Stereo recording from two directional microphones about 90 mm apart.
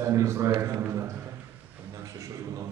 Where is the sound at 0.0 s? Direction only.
35° right (ahead or behind).